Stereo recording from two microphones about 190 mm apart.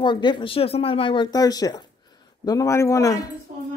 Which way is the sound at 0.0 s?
25° left (ahead or behind).